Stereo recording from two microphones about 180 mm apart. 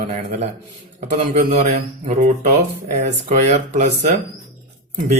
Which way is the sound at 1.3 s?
40° right (ahead or behind).